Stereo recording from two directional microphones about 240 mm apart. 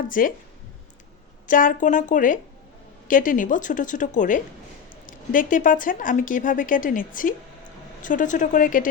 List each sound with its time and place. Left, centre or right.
0.1 s speech: left
1.5 s speech: left